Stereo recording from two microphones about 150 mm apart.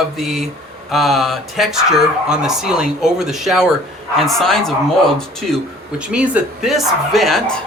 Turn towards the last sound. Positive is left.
turn(degrees=0)  # may be behind; listen again after turning